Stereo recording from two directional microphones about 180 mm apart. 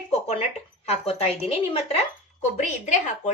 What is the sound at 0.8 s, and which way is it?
A woman's voice, 35° left (ahead or behind).